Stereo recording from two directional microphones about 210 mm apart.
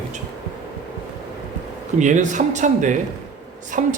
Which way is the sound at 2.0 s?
35° right (ahead or behind).